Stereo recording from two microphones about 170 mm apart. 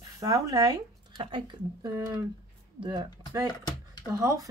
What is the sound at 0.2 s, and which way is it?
Speech, 20° right (ahead or behind).